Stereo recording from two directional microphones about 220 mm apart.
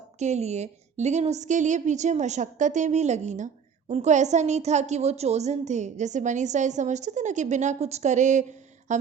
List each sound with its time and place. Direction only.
0.2 s a woman's voice: 30° right (ahead or behind)